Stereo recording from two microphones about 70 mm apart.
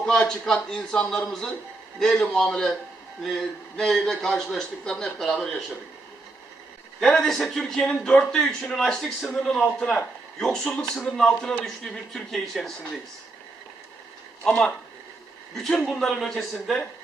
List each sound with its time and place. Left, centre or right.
0.0 s a man's voice: centre
7.0 s a man's voice: centre
11.6 s a man's voice: centre
14.4 s a man's voice: centre